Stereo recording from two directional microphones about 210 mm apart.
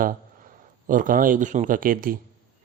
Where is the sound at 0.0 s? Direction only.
40° right (ahead or behind).